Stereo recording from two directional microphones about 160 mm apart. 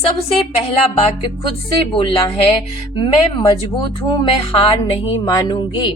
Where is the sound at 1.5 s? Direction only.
35° left (ahead or behind).